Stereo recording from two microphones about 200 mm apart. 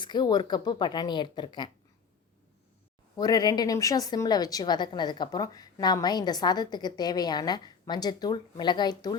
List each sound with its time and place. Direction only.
0.0 s a woman's voice: 20° left (ahead or behind)
3.2 s a woman's voice: 20° left (ahead or behind)